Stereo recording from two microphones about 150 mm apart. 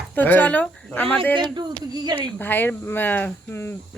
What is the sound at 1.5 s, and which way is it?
Speech, 30° right (ahead or behind).